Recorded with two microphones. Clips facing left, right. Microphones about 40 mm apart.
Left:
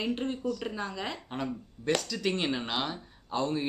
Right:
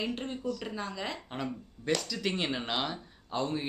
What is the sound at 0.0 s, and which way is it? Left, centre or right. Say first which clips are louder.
Speech: left 3 dB; centre.